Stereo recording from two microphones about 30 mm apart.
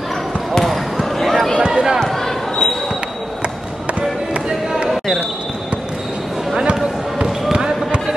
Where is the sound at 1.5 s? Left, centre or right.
Right.